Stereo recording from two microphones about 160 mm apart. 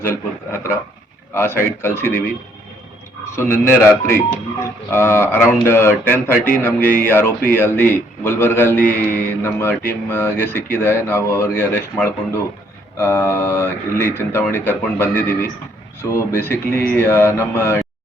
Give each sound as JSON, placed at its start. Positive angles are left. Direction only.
{"t": 1.3, "sound": "a man's voice", "side_deg": 15}
{"t": 3.3, "sound": "a man's voice", "side_deg": 15}